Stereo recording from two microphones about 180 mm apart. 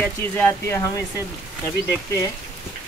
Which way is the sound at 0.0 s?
10° left (ahead or behind).